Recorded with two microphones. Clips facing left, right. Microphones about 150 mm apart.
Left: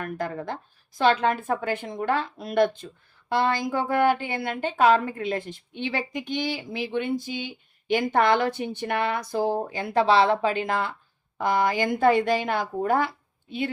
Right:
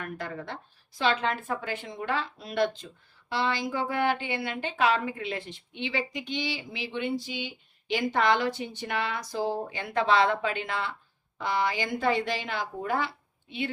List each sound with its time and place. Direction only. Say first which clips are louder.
0.0 s a woman's voice: left 6 dB; 45° left (ahead or behind)